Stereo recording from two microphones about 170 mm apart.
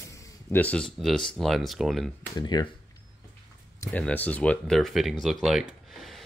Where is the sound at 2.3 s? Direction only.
25° left (ahead or behind).